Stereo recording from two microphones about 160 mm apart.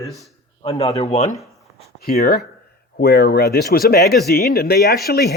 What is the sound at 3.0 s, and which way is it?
Speech, 80° left.